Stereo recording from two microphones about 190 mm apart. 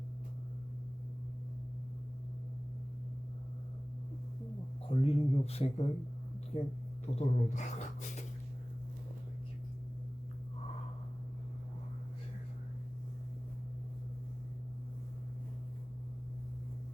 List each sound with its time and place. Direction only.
4.9 s speech: 30° left (ahead or behind)